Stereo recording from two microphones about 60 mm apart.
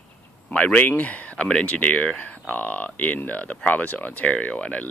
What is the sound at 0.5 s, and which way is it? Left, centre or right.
Speech, left.